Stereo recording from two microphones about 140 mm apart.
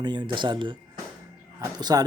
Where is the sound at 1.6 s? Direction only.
30° right (ahead or behind).